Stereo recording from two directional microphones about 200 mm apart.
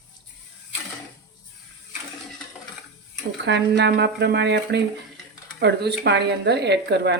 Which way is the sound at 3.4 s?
60° right (ahead or behind).